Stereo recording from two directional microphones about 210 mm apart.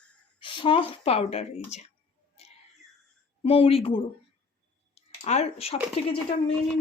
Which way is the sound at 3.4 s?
25° left (ahead or behind).